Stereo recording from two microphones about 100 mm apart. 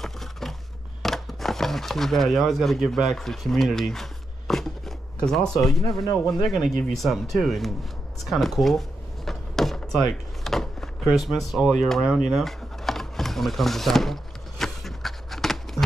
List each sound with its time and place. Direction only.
0.0 s a sound: 5° left (ahead or behind)
5.5 s speech: 35° left (ahead or behind)
6.4 s speech: centre (ahead or behind)
8.3 s drawer open or close: centre (ahead or behind)
10.4 s door: 5° left (ahead or behind)